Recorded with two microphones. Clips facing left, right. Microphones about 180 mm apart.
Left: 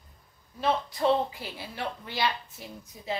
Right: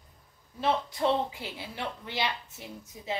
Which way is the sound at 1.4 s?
20° right (ahead or behind).